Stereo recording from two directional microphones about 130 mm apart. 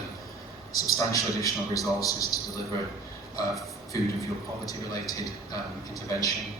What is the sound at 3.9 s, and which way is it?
A man's voice, 25° left (ahead or behind).